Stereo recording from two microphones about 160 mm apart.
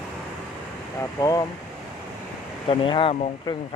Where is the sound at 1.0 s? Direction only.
20° left (ahead or behind).